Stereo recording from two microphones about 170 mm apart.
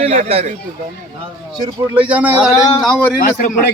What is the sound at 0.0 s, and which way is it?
Speech, 40° right (ahead or behind).